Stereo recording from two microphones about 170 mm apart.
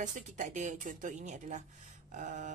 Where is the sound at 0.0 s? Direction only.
45° right (ahead or behind).